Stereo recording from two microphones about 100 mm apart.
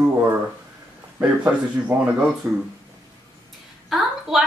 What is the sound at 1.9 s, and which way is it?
Speech, 25° right (ahead or behind).